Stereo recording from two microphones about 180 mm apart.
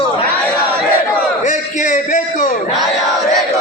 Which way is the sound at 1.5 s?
45° left (ahead or behind).